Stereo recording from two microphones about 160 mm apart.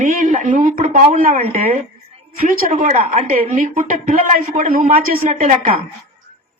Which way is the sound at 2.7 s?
50° right (ahead or behind).